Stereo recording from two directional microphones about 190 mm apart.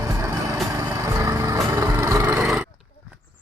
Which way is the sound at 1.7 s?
15° right (ahead or behind).